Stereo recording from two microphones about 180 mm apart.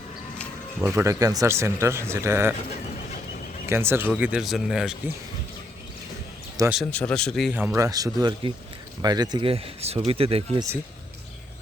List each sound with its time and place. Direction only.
0.9 s speech: 15° right (ahead or behind)
3.7 s speech: 15° right (ahead or behind)
6.6 s speech: 20° right (ahead or behind)
6.9 s a man's voice: 5° left (ahead or behind)
7.9 s speech: 20° right (ahead or behind)